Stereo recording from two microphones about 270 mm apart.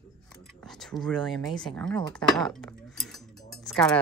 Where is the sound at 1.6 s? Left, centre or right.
Centre.